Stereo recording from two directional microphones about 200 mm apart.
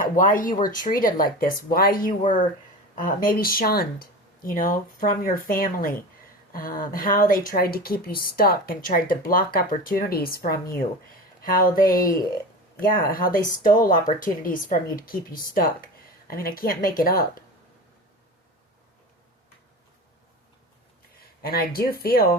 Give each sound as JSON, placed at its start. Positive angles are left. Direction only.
{"t": 0.0, "sound": "speech", "side_deg": 40}
{"t": 21.2, "sound": "speech", "side_deg": 50}